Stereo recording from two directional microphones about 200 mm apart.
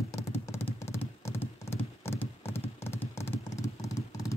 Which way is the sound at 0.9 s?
10° left (ahead or behind).